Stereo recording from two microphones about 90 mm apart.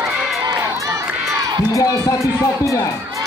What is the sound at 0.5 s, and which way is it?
Crowd, 40° right (ahead or behind).